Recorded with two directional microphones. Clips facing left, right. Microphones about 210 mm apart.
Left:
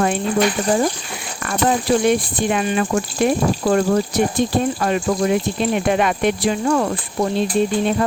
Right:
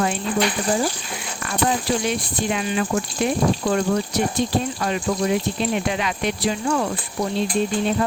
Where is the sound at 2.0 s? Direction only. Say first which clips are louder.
Left 7 dB; 55° left (ahead or behind).